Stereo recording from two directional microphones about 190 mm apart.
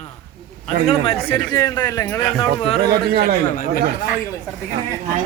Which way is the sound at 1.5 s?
15° left (ahead or behind).